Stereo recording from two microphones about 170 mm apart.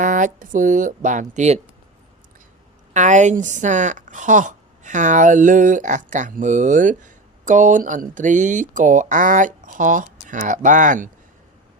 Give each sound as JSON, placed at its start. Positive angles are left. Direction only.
{"t": 0.0, "sound": "a woman's voice", "side_deg": -50}
{"t": 2.9, "sound": "a woman's voice", "side_deg": -45}